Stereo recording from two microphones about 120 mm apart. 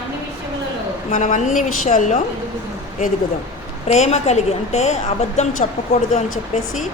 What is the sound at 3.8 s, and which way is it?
A woman's voice, 70° left (ahead or behind).